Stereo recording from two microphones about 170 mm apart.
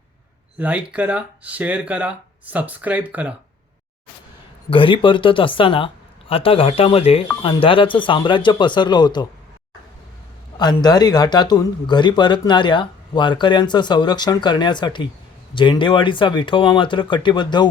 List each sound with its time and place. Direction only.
0.6 s speech: 5° right (ahead or behind)
4.7 s speech: 30° left (ahead or behind)
10.6 s speech: 25° left (ahead or behind)